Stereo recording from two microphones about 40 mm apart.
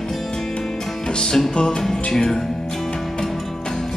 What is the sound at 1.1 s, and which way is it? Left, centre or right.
Music, centre.